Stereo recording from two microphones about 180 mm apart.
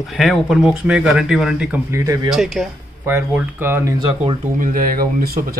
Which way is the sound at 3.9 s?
30° right (ahead or behind).